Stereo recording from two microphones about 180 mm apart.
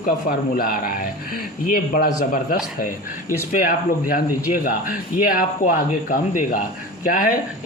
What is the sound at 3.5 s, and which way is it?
Speech, 50° left (ahead or behind).